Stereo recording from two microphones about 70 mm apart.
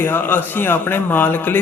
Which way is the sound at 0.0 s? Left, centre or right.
Left.